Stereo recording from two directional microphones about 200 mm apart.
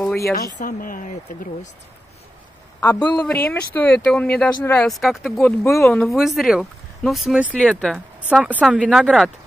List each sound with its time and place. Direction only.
0.0 s a sound: 15° left (ahead or behind)
0.6 s speech: 45° left (ahead or behind)
3.0 s speech: 20° left (ahead or behind)
3.4 s speech: 10° left (ahead or behind)
5.4 s speech: 10° left (ahead or behind)
5.9 s speech: centre (ahead or behind)
8.7 s speech: 5° left (ahead or behind)